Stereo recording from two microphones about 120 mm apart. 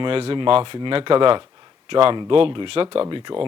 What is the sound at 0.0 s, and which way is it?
Speech, 50° right (ahead or behind).